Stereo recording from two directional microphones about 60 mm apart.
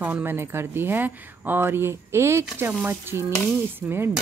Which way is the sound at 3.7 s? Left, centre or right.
Right.